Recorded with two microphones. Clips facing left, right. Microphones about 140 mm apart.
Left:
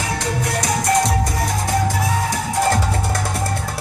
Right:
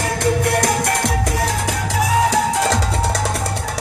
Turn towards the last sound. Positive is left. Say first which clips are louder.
# even
turn(degrees=-90)